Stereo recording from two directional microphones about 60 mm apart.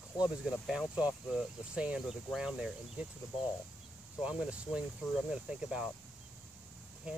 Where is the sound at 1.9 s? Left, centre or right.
Centre.